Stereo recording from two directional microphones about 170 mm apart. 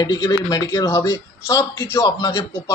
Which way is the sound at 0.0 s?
25° left (ahead or behind).